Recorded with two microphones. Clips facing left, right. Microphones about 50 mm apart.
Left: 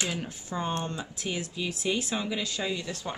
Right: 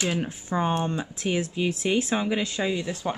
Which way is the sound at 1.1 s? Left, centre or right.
Right.